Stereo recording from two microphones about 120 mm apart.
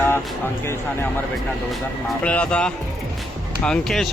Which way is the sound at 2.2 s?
10° left (ahead or behind).